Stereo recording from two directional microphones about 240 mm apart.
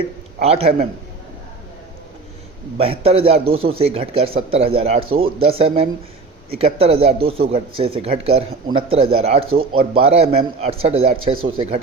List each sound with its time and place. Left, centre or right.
0.3 s a man's voice: right
2.7 s a man's voice: right
9.6 s speech: right
10.0 s a man's voice: right